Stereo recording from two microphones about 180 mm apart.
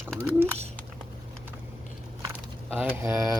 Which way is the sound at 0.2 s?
10° right (ahead or behind).